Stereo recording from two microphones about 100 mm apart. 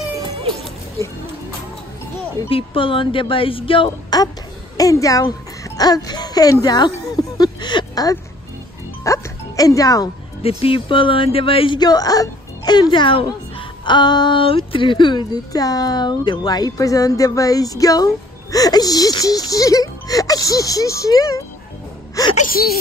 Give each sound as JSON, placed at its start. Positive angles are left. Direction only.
{"t": 2.5, "sound": "speech", "side_deg": 60}
{"t": 4.1, "sound": "a child's voice", "side_deg": 45}
{"t": 6.6, "sound": "a sound", "side_deg": 45}
{"t": 9.0, "sound": "music", "side_deg": 35}
{"t": 10.4, "sound": "speech", "side_deg": 65}
{"t": 11.8, "sound": "speech", "side_deg": 40}
{"t": 12.9, "sound": "speech", "side_deg": 55}